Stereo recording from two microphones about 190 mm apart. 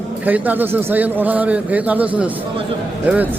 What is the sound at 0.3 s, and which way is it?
A man's voice, 10° right (ahead or behind).